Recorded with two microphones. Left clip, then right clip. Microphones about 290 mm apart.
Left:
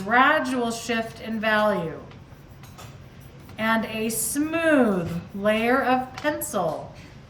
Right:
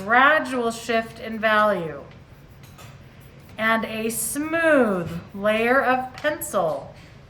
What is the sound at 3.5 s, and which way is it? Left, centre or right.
A woman's voice, centre.